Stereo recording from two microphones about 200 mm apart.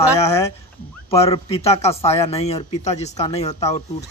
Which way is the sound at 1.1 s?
30° left (ahead or behind).